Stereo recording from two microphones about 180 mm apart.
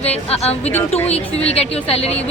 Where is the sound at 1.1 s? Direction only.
35° left (ahead or behind).